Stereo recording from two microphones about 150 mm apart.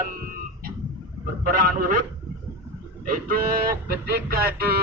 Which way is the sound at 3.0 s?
75° right (ahead or behind).